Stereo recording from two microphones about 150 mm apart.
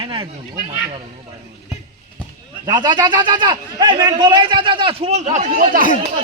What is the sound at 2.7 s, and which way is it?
A man's voice, 30° right (ahead or behind).